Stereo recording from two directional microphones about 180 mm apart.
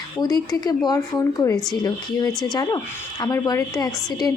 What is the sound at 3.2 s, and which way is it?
A woman's voice, 20° left (ahead or behind).